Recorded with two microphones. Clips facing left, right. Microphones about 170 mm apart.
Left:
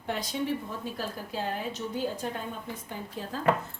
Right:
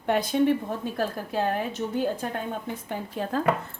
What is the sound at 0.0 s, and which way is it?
A woman's voice, 60° right (ahead or behind).